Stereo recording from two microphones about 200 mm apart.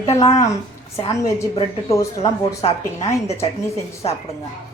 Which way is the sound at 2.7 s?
15° left (ahead or behind).